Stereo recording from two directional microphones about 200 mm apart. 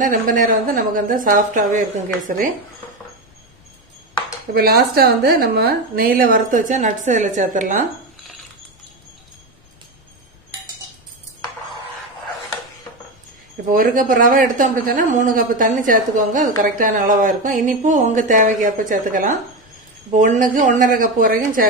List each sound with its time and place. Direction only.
0.0 s a man's voice: 40° right (ahead or behind)
4.6 s a woman's voice: 50° right (ahead or behind)
13.7 s a man's voice: 45° right (ahead or behind)